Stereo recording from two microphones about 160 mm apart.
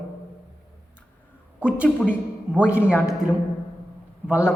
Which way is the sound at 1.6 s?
10° right (ahead or behind).